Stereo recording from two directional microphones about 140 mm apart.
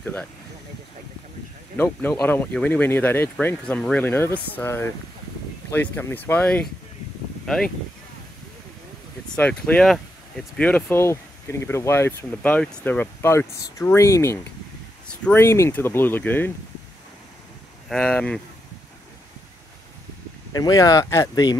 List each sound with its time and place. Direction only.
0.0 s speech: 10° left (ahead or behind)
1.8 s speech: 15° left (ahead or behind)
9.3 s speech: 10° left (ahead or behind)
17.8 s speech: 5° left (ahead or behind)
20.5 s speech: 25° left (ahead or behind)